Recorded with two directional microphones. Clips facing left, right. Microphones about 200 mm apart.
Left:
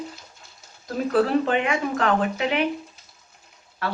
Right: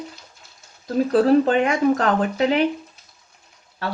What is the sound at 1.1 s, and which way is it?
Speech, 40° right (ahead or behind).